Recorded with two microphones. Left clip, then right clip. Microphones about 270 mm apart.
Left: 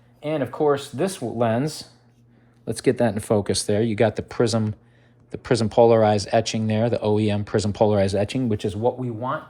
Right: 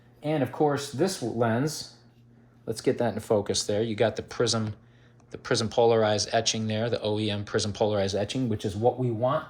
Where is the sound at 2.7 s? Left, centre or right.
Left.